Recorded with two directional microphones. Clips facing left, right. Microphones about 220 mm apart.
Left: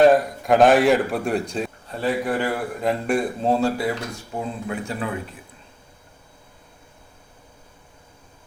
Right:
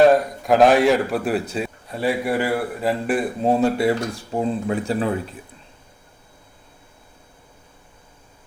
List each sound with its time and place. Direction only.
0.0 s a man's voice: centre (ahead or behind)
3.8 s speech: 30° right (ahead or behind)